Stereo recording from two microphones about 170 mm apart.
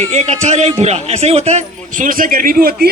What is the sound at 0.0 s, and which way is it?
A man's voice, 40° right (ahead or behind).